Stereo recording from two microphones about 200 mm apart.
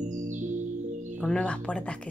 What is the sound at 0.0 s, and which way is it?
Music, 35° right (ahead or behind).